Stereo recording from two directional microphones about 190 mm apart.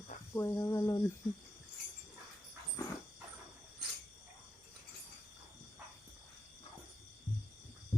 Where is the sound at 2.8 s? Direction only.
20° left (ahead or behind).